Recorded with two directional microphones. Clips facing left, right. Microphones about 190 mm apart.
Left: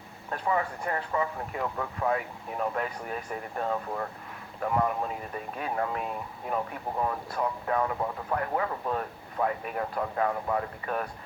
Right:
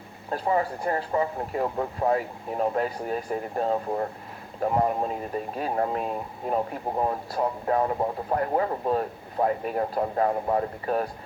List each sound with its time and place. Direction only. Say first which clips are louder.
0.3 s speech: right 4 dB; 35° right (ahead or behind)